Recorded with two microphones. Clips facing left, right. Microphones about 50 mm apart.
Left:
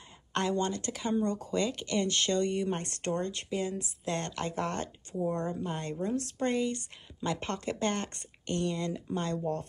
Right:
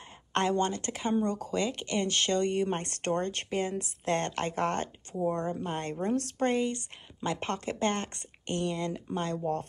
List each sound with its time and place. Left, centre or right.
0.3 s speech: right
5.1 s speech: right
8.5 s speech: centre